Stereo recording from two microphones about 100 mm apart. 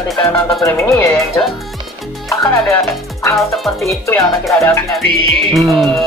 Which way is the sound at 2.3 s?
30° left (ahead or behind).